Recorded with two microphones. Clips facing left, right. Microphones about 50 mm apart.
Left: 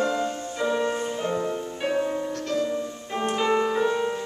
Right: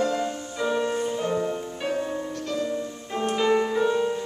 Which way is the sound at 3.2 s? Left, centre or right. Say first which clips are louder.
Right 1 dB; centre.